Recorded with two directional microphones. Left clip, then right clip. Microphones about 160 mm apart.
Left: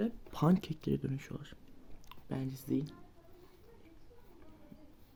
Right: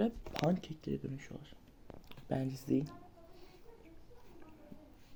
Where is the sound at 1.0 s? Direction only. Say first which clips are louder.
Left 4 dB; 50° left (ahead or behind).